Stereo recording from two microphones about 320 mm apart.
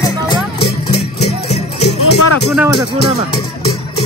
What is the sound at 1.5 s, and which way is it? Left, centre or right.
Music, centre.